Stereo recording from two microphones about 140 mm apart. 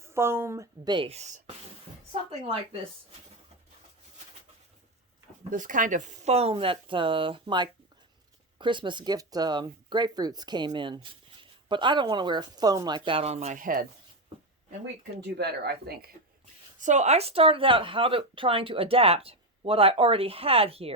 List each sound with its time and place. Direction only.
0.0 s speech: 20° right (ahead or behind)
0.9 s speech: 35° right (ahead or behind)
1.1 s speech: 55° right (ahead or behind)
5.5 s speech: 70° right (ahead or behind); by 13.6 s 50° right (ahead or behind)
13.6 s speech: 80° right
16.7 s speech: 60° right (ahead or behind); by 20.9 s 45° right (ahead or behind)